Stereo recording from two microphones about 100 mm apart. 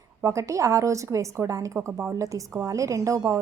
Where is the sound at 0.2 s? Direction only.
30° right (ahead or behind).